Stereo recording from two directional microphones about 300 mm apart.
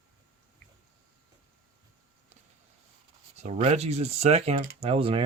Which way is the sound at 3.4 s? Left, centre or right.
Right.